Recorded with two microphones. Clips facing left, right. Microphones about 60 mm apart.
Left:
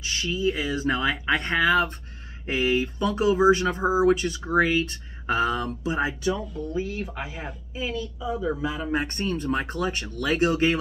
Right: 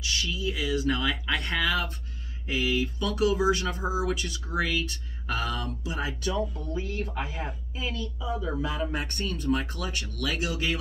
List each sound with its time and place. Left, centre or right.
0.0 s speech: left
6.2 s a woman's voice: centre
8.9 s speech: left